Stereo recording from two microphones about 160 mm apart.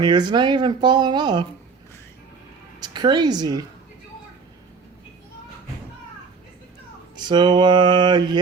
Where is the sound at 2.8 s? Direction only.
25° right (ahead or behind).